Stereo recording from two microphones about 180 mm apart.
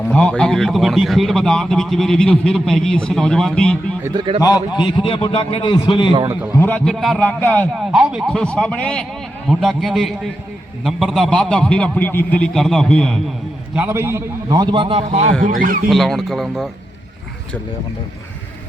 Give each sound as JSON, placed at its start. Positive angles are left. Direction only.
{"t": 0.0, "sound": "speech", "side_deg": 5}
{"t": 4.1, "sound": "a man's voice", "side_deg": -25}
{"t": 4.4, "sound": "a man's voice", "side_deg": 20}
{"t": 6.5, "sound": "a man's voice", "side_deg": 10}
{"t": 7.8, "sound": "speech", "side_deg": -5}
{"t": 13.7, "sound": "a man's voice", "side_deg": -10}
{"t": 15.4, "sound": "a man's voice", "side_deg": -50}
{"t": 15.9, "sound": "speech", "side_deg": 0}